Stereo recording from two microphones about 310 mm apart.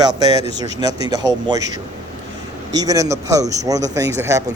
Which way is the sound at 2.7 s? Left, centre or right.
Centre.